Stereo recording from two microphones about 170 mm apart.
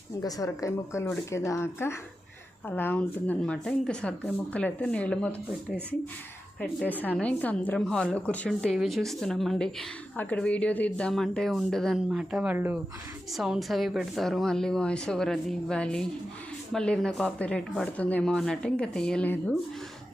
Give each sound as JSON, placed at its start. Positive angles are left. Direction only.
{"t": 0.2, "sound": "speech", "side_deg": 20}
{"t": 6.6, "sound": "speech", "side_deg": 10}